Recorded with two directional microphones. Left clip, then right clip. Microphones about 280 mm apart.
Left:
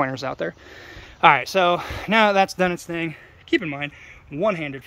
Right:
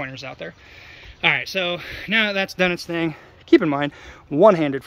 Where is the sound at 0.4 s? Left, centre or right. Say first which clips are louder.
Left 7 dB; left.